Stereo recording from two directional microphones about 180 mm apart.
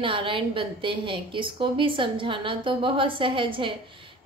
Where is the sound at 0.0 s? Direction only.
30° right (ahead or behind).